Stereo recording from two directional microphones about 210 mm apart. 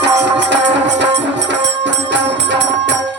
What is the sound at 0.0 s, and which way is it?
Music, 55° right (ahead or behind).